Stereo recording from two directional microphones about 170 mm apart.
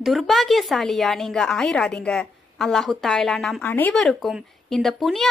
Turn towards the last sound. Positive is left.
turn(degrees=0)  # may be behind; listen again after turning